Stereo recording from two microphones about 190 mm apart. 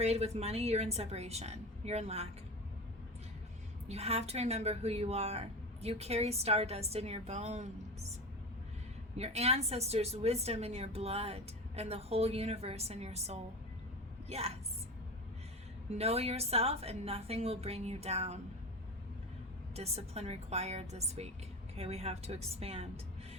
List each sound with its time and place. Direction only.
0.0 s a woman's voice: 35° right (ahead or behind)
3.8 s a woman's voice: 35° right (ahead or behind)
9.1 s a woman's voice: 35° right (ahead or behind)
16.0 s a woman's voice: 35° right (ahead or behind)
19.7 s a woman's voice: 35° right (ahead or behind)